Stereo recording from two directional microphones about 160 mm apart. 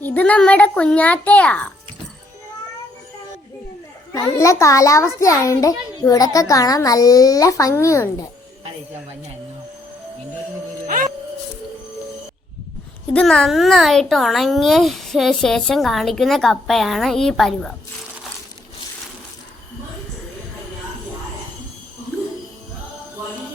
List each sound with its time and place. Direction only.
0.0 s a child's voice: 10° left (ahead or behind)
4.1 s a child's voice: 20° left (ahead or behind)
10.8 s music: 60° right (ahead or behind)
13.1 s speech: 5° left (ahead or behind)